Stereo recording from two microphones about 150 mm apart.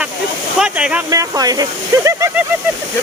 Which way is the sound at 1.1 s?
25° right (ahead or behind).